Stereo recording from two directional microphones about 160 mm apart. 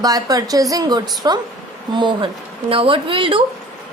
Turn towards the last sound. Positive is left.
turn(degrees=-30)  # may be behind; listen again after turning